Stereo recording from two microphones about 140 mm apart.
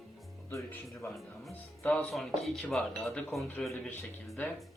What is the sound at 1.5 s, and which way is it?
Speech, 10° left (ahead or behind).